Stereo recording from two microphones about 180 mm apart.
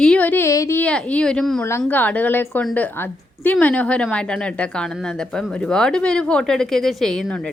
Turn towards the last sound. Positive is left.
turn(degrees=5)  # may be behind; listen again after turning